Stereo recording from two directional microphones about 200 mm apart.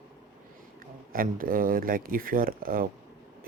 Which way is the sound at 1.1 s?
45° right (ahead or behind).